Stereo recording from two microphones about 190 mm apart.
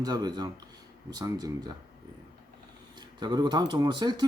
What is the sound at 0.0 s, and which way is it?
Speech, 20° right (ahead or behind).